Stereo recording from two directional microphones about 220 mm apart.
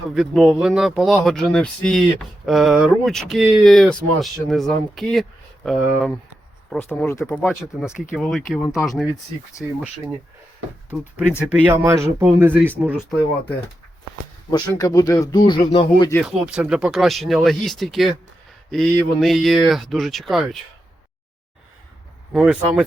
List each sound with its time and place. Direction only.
0.1 s speech: centre (ahead or behind)
7.8 s speech: centre (ahead or behind)
10.9 s speech: 5° right (ahead or behind)
14.5 s speech: 15° left (ahead or behind)
16.2 s speech: 5° right (ahead or behind)
22.3 s speech: 5° right (ahead or behind)